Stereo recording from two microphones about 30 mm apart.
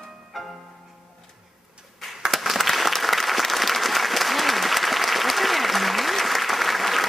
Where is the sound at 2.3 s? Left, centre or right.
Centre.